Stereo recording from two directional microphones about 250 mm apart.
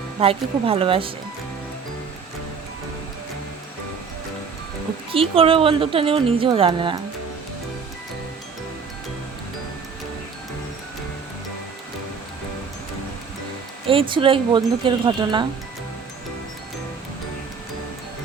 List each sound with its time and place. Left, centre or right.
0.2 s speech: right
5.1 s speech: right
13.8 s speech: right